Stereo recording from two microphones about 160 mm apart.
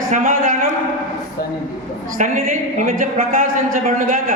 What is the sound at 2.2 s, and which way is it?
A woman's voice, 55° right (ahead or behind).